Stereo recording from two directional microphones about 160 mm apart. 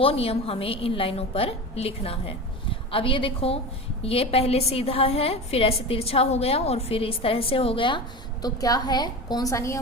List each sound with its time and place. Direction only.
0.0 s a woman's voice: 40° left (ahead or behind); by 9.7 s 20° left (ahead or behind)